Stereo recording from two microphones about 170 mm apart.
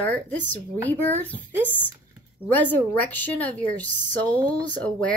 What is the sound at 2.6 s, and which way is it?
A woman's voice, 10° left (ahead or behind).